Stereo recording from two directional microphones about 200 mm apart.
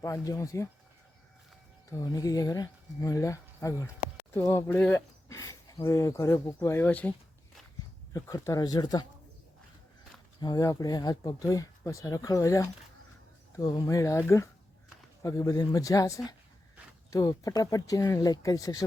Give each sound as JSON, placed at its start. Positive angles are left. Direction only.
{"t": 0.0, "sound": "speech", "side_deg": 15}
{"t": 1.9, "sound": "speech", "side_deg": 15}
{"t": 8.1, "sound": "speech", "side_deg": 15}
{"t": 10.4, "sound": "speech", "side_deg": 20}